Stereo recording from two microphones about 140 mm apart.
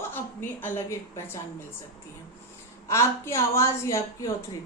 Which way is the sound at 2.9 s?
20° left (ahead or behind).